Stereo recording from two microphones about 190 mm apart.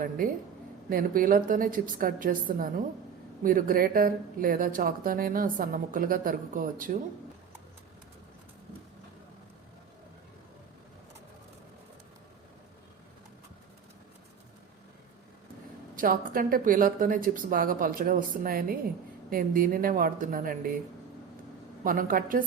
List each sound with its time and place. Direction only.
0.9 s speech: 50° right (ahead or behind)
16.0 s speech: 45° right (ahead or behind)
21.8 s speech: 45° right (ahead or behind)